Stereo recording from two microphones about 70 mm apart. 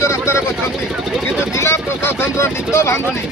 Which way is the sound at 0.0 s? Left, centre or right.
Left.